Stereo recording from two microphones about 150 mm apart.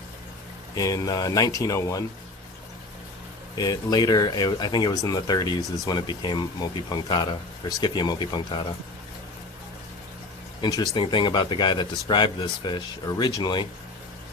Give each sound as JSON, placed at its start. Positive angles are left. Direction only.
{"t": 0.8, "sound": "speech", "side_deg": 25}
{"t": 3.6, "sound": "speech", "side_deg": 25}
{"t": 10.6, "sound": "speech", "side_deg": 25}